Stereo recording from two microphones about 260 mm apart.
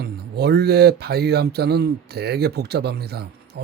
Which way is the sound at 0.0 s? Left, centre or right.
Right.